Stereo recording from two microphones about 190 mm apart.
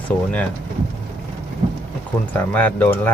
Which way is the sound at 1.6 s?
40° right (ahead or behind).